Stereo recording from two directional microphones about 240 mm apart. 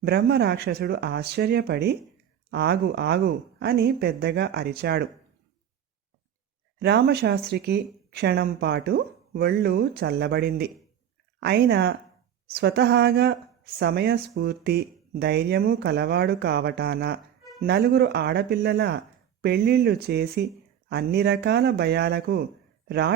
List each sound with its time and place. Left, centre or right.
0.0 s speech: right
6.7 s speech: right